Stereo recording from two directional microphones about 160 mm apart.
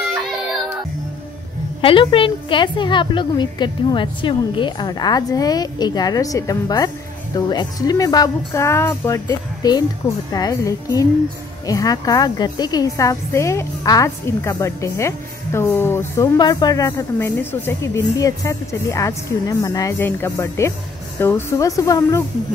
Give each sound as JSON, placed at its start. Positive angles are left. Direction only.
{"t": 1.8, "sound": "a woman's voice", "side_deg": 35}